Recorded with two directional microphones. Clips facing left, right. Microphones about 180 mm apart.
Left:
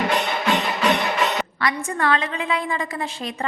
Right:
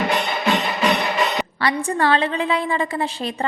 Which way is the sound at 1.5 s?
30° right (ahead or behind).